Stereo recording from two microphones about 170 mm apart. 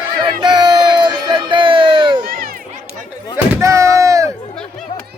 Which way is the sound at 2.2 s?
60° right (ahead or behind).